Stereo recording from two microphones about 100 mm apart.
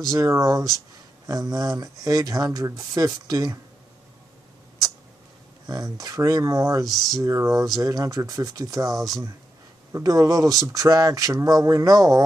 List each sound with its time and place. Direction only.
0.1 s speech: 35° right (ahead or behind)
5.7 s speech: 40° right (ahead or behind)
6.9 s speech: centre (ahead or behind)
7.2 s speech: 30° right (ahead or behind)
9.9 s speech: 35° right (ahead or behind)